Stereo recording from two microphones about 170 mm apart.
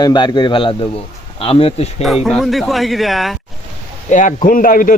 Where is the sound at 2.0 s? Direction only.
Centre (ahead or behind).